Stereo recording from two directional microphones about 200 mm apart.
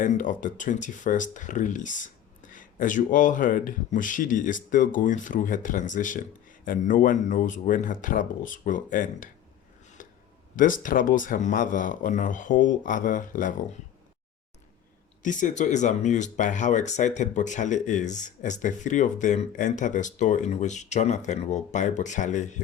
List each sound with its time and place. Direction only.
0.0 s speech: 40° left (ahead or behind)
10.0 s a sound: 40° left (ahead or behind)
10.5 s speech: 40° left (ahead or behind)
15.2 s speech: 40° left (ahead or behind)